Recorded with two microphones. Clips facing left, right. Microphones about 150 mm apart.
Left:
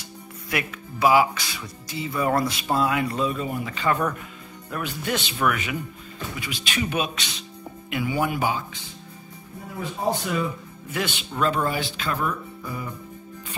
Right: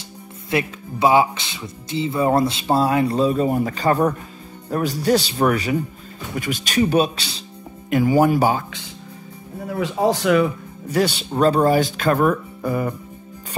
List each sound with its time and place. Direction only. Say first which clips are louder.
0.5 s speech: right 7 dB; 25° right (ahead or behind)
6.3 s speech: right 10 dB; 45° right (ahead or behind)
9.7 s speech: right 7 dB; 90° right
10.9 s speech: right 9 dB; 35° right (ahead or behind); by 12.9 s 60° right (ahead or behind)